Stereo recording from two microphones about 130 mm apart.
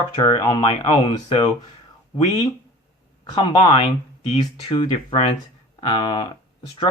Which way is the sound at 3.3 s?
40° left (ahead or behind).